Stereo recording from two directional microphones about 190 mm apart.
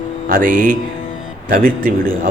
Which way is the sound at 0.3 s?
45° right (ahead or behind).